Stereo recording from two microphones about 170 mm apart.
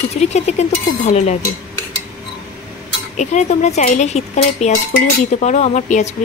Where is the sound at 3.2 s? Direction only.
45° left (ahead or behind).